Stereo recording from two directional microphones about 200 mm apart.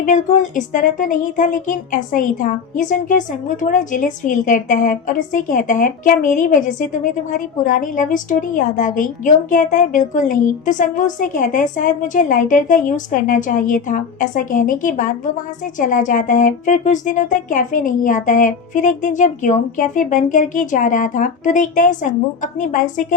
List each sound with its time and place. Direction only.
0.0 s speech: 40° left (ahead or behind)